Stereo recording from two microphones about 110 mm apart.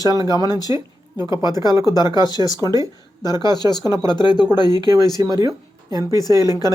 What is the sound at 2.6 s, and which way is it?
Speech, 35° right (ahead or behind).